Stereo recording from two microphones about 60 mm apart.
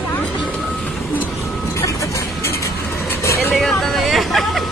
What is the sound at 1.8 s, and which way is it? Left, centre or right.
Music, left.